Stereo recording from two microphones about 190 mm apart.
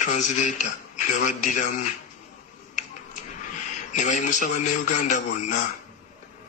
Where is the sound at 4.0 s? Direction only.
40° left (ahead or behind).